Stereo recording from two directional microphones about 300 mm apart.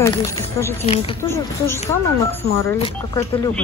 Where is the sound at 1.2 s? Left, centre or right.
Centre.